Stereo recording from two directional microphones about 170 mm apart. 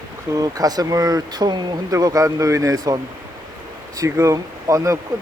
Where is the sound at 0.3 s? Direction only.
20° right (ahead or behind).